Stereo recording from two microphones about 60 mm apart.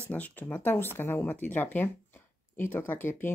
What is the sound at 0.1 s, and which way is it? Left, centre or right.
Speech, left.